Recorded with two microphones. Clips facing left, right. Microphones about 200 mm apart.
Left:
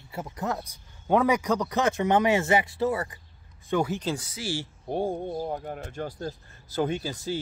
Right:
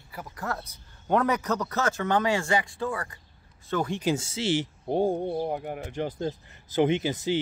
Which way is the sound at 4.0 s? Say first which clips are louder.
Right 4 dB; 25° right (ahead or behind).